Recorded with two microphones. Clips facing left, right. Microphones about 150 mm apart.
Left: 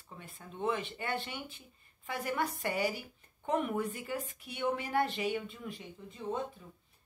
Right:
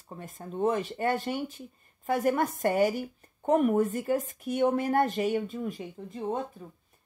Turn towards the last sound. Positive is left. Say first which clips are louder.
# right 6 dB
turn(degrees=-45)  # may be behind; listen again after turning